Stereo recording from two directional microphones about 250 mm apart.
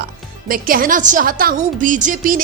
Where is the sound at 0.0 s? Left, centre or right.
Right.